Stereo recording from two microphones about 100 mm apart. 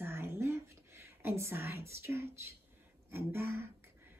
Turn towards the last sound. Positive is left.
turn(degrees=-25)  # may be behind; listen again after turning